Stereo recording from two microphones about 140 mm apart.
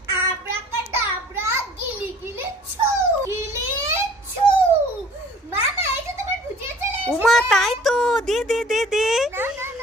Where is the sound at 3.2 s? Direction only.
20° right (ahead or behind).